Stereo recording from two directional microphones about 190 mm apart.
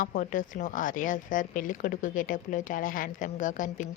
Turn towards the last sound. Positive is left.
turn(degrees=45)  # may be behind; listen again after turning